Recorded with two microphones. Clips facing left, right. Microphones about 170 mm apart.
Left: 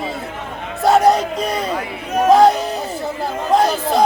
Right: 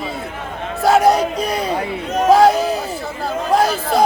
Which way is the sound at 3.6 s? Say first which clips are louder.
Left 1 dB; centre (ahead or behind).